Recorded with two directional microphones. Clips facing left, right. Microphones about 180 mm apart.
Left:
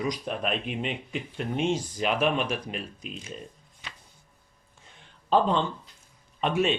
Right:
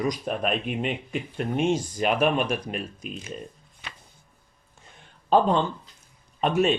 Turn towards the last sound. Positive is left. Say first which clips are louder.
# right 3 dB
turn(degrees=-45)  # may be behind; listen again after turning